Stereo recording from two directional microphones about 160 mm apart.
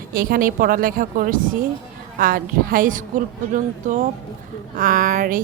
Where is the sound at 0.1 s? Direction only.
65° right (ahead or behind).